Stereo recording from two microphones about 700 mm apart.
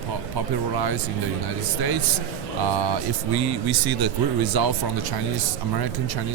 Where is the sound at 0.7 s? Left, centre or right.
Right.